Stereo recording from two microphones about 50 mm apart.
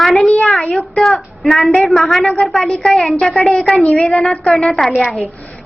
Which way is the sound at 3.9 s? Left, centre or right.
Left.